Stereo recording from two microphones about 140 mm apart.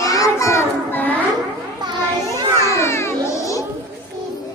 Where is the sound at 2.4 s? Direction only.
25° right (ahead or behind).